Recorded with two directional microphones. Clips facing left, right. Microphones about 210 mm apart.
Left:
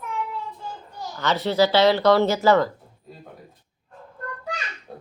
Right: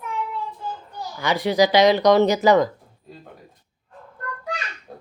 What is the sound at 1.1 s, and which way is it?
Speech, 10° right (ahead or behind).